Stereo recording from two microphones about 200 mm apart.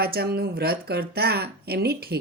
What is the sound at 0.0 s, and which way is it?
A woman's voice, 50° right (ahead or behind).